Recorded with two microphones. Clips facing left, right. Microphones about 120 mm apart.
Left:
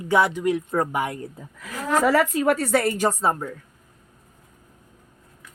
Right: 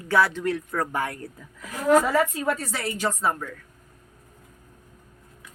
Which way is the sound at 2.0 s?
90° left.